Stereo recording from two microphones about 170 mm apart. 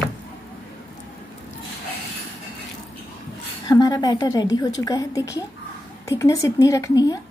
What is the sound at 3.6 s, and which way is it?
A woman's voice, 25° left (ahead or behind).